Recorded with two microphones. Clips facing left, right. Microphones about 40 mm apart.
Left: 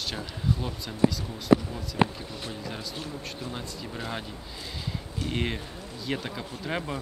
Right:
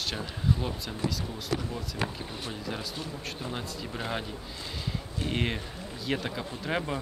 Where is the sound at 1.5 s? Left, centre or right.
Left.